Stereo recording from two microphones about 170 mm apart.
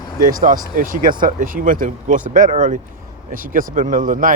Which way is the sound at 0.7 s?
55° right (ahead or behind).